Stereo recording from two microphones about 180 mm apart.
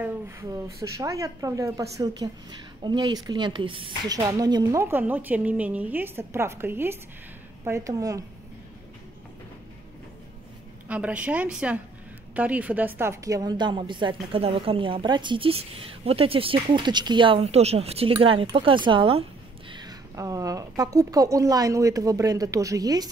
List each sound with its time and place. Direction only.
0.0 s a woman's voice: 15° right (ahead or behind)
10.9 s a woman's voice: 5° right (ahead or behind)